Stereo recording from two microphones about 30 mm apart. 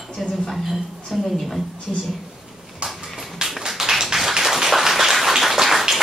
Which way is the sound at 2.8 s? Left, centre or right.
Right.